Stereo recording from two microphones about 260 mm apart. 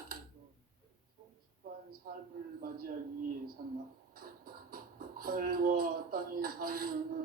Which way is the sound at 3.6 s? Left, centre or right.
Right.